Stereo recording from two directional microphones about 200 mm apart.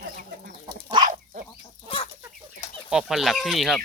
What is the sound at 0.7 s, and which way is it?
Chicken, 20° right (ahead or behind).